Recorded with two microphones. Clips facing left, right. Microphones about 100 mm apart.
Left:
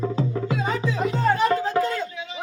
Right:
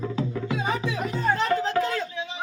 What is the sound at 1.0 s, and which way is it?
Music, 50° left (ahead or behind).